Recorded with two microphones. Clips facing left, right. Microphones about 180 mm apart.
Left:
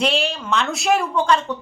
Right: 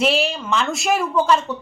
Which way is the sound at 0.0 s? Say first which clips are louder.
Right 2 dB; 5° right (ahead or behind).